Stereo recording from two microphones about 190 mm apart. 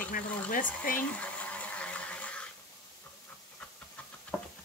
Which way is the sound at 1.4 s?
10° left (ahead or behind).